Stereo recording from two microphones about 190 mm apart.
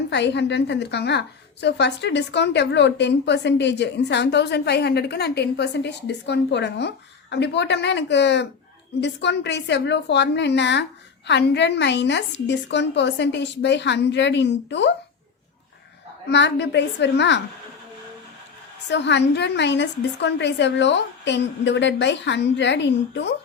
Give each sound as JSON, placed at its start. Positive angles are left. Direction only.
{"t": 0.1, "sound": "a woman's voice", "side_deg": 65}
{"t": 16.3, "sound": "a woman's voice", "side_deg": 65}
{"t": 18.9, "sound": "a woman's voice", "side_deg": 65}